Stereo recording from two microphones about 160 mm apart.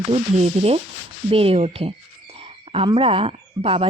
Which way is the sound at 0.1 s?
40° right (ahead or behind).